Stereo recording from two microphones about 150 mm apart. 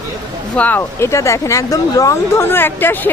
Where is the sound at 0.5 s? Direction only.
10° left (ahead or behind).